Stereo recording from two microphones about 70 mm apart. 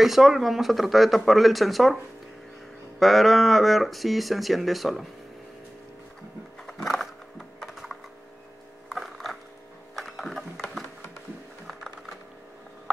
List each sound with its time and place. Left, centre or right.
0.0 s speech: centre
3.0 s speech: centre
6.6 s typing: centre
8.9 s a sound: centre
9.9 s music: centre